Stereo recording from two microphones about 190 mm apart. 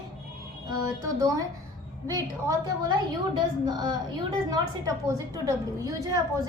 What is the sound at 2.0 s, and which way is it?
A woman's voice, 20° right (ahead or behind).